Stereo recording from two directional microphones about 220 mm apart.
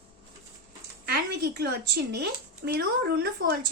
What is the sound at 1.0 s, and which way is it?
A woman's voice, 45° right (ahead or behind).